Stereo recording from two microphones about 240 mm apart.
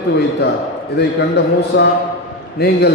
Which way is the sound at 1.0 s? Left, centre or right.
Left.